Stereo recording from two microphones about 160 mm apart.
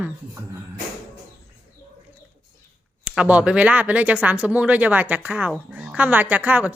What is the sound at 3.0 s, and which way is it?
Speech, 10° right (ahead or behind).